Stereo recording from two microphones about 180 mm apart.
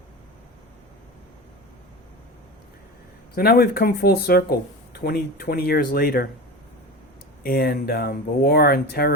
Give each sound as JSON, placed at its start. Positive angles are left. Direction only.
{"t": 3.3, "sound": "speech", "side_deg": 55}
{"t": 7.4, "sound": "speech", "side_deg": 55}